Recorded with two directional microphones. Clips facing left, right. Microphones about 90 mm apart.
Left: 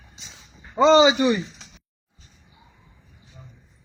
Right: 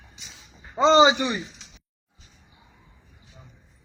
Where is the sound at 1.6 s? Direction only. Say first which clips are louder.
Left 3 dB; 40° left (ahead or behind).